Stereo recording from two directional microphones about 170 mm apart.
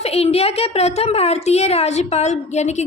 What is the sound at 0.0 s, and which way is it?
A woman's voice, 35° left (ahead or behind).